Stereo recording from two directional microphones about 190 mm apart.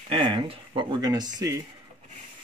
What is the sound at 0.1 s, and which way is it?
Speech, 25° right (ahead or behind).